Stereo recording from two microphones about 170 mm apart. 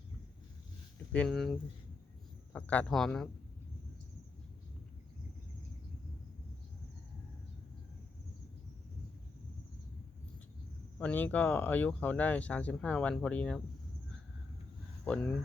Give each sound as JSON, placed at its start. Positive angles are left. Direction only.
{"t": 1.1, "sound": "speech", "side_deg": 5}
{"t": 10.9, "sound": "speech", "side_deg": 10}
{"t": 15.0, "sound": "speech", "side_deg": 5}